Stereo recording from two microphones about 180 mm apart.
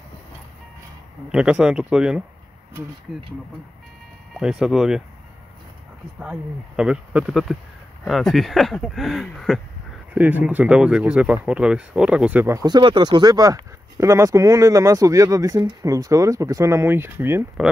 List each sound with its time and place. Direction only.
1.3 s speech: 5° right (ahead or behind)
4.3 s speech: 5° right (ahead or behind)
6.8 s speech: 5° right (ahead or behind)
10.1 s speech: 10° right (ahead or behind)